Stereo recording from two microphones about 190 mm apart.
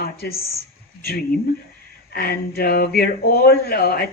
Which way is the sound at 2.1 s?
55° left (ahead or behind).